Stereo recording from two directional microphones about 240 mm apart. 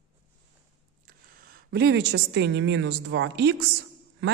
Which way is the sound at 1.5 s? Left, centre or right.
Right.